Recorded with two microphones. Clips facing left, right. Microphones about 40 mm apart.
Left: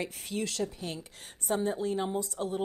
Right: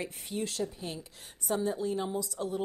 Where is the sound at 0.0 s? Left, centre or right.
Left.